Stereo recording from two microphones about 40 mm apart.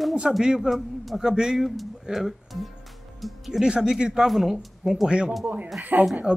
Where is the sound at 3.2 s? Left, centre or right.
Centre.